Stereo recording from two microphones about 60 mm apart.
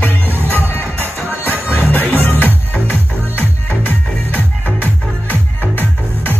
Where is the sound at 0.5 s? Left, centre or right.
Left.